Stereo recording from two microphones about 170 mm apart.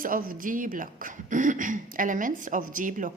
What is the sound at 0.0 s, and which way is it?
A woman's voice, 55° right (ahead or behind).